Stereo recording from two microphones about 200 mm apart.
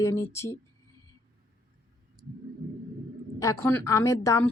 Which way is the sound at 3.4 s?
15° left (ahead or behind).